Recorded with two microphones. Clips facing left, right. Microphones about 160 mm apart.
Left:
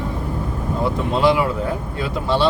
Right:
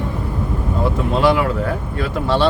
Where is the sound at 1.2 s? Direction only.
15° left (ahead or behind).